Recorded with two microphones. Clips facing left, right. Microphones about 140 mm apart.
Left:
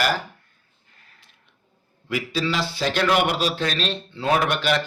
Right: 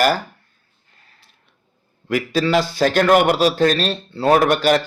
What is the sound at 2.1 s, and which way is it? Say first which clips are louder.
A man's voice: right 7 dB; 50° right (ahead or behind).